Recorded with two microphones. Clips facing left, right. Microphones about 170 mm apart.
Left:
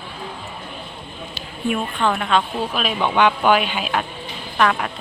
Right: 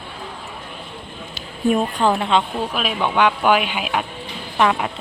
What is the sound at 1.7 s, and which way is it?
Speech, 35° right (ahead or behind).